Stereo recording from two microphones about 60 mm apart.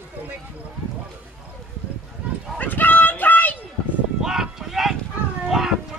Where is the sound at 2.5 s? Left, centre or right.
Left.